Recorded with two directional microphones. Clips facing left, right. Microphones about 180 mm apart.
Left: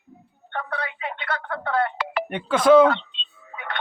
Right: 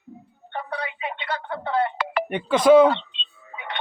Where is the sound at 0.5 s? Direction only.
15° right (ahead or behind).